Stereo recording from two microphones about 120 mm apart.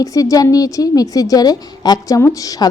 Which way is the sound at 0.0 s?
30° left (ahead or behind).